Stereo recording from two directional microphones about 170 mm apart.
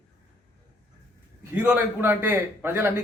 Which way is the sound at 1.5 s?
10° right (ahead or behind).